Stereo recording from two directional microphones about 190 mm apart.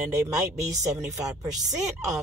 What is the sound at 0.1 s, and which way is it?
Speech, 15° right (ahead or behind).